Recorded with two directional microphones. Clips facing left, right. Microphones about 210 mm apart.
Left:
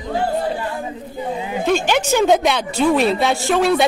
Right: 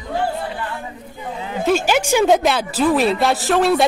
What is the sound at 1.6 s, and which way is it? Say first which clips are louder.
A woman's voice: right 1 dB; 5° right (ahead or behind).